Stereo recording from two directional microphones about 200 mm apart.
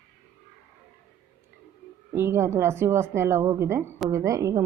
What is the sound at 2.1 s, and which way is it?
A woman's voice, 15° right (ahead or behind).